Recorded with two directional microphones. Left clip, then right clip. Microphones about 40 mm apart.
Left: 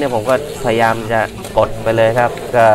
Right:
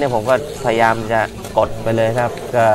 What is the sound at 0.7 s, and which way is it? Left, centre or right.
Speech, right.